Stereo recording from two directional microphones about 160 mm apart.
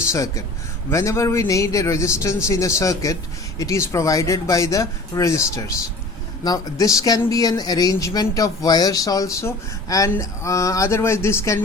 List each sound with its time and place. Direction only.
0.1 s speech: 20° left (ahead or behind)